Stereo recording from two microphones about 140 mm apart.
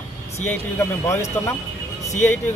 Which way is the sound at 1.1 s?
20° left (ahead or behind).